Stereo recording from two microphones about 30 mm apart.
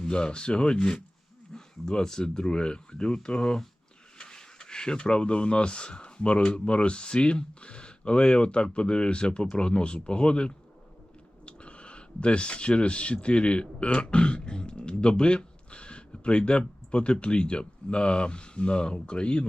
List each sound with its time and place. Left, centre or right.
0.0 s speech: left